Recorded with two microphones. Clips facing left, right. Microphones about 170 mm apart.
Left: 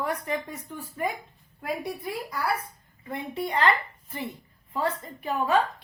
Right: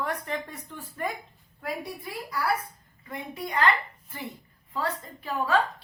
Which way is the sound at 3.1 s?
30° left (ahead or behind).